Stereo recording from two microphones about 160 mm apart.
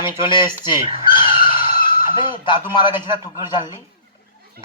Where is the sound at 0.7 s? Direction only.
30° left (ahead or behind).